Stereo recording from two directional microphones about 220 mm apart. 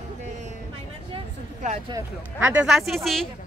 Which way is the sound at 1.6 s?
30° right (ahead or behind).